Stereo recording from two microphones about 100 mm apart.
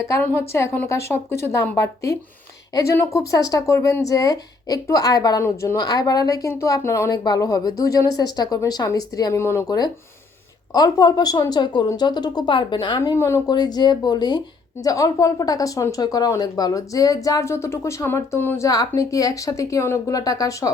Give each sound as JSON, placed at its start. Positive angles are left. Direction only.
{"t": 0.2, "sound": "speech", "side_deg": 25}
{"t": 7.1, "sound": "speech", "side_deg": 40}
{"t": 9.4, "sound": "speech", "side_deg": 25}
{"t": 9.6, "sound": "speech", "side_deg": 40}
{"t": 13.1, "sound": "speech", "side_deg": 25}
{"t": 13.5, "sound": "speech", "side_deg": 45}
{"t": 18.6, "sound": "speech", "side_deg": 40}